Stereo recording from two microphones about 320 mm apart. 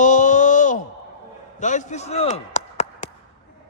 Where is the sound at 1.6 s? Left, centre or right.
Left.